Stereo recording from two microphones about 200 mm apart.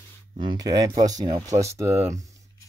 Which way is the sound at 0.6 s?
20° right (ahead or behind).